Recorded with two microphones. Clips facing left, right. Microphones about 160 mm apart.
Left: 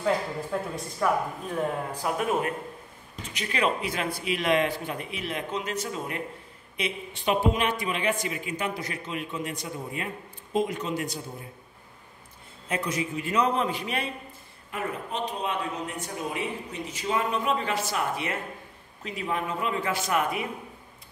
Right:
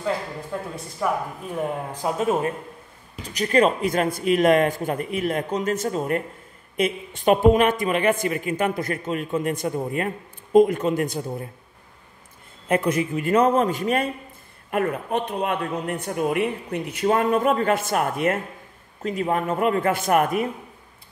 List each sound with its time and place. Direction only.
0.0 s speech: centre (ahead or behind)
2.0 s speech: 25° right (ahead or behind)
3.2 s speech: 40° right (ahead or behind)
12.6 s speech: 55° right (ahead or behind)
14.7 s speech: 60° right (ahead or behind)